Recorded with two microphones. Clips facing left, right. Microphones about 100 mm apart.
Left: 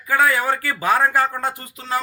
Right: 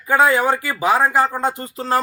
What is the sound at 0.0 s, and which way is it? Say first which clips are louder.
Speech: right 3 dB; 25° right (ahead or behind).